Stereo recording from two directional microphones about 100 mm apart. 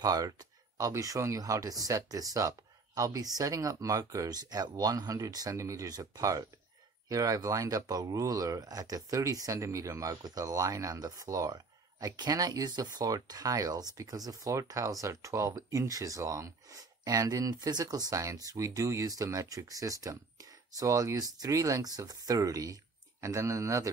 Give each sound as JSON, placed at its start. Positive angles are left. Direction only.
{"t": 0.0, "sound": "speech", "side_deg": -35}